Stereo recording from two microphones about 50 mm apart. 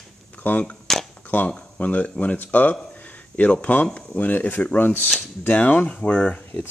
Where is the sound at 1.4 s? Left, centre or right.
Left.